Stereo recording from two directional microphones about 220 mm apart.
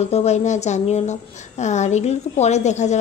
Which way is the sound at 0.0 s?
30° left (ahead or behind).